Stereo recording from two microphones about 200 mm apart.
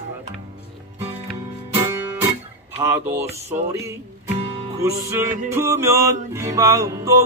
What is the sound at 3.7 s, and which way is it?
Speech, 15° right (ahead or behind).